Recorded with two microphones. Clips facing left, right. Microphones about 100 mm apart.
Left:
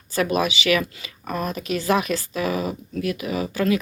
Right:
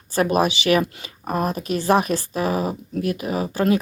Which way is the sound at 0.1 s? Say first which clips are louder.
Right 3 dB; 45° right (ahead or behind).